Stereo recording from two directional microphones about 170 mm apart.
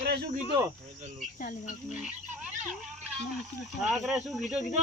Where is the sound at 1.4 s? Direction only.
50° left (ahead or behind).